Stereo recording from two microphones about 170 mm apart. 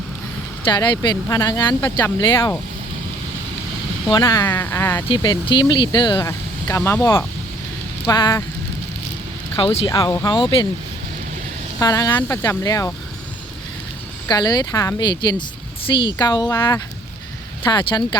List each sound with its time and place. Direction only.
0.7 s speech: 25° left (ahead or behind)
4.1 s speech: 25° left (ahead or behind)
5.0 s speech: 25° left (ahead or behind)
9.6 s speech: 30° left (ahead or behind)
9.9 s speech: 20° left (ahead or behind)
11.8 s speech: 20° left (ahead or behind)
14.3 s speech: 20° left (ahead or behind)
17.6 s speech: 25° left (ahead or behind)